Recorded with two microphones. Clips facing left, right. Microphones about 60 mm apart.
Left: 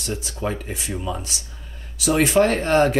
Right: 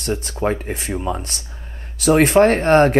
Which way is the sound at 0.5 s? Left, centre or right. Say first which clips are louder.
Right 5 dB; right.